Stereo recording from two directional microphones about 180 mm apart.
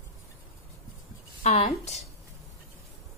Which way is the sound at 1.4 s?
35° left (ahead or behind).